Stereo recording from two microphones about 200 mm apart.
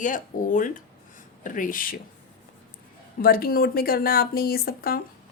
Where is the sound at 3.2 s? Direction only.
50° left (ahead or behind).